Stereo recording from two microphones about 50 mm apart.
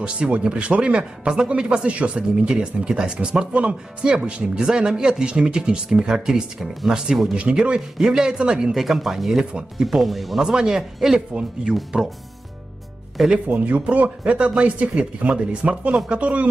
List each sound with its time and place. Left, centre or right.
0.0 s speech: right; by 7.0 s centre
7.3 s speech: right
8.0 s speech: centre
8.7 s speech: centre
9.5 s speech: centre
9.8 s speech: centre
11.7 s speech: centre
13.5 s speech: right